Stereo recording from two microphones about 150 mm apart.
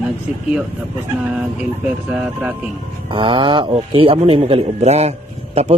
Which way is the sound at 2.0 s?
5° right (ahead or behind).